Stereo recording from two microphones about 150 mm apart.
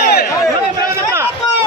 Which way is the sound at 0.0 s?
90° left.